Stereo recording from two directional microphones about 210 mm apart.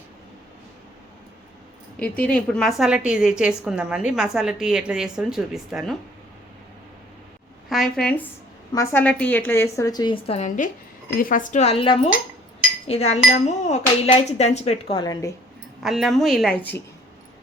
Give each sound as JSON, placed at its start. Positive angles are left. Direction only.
{"t": 2.0, "sound": "a woman's voice", "side_deg": 5}
{"t": 7.7, "sound": "a woman's voice", "side_deg": 0}
{"t": 15.8, "sound": "a woman's voice", "side_deg": 0}